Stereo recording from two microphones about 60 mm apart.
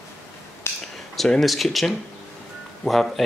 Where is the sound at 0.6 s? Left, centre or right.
Left.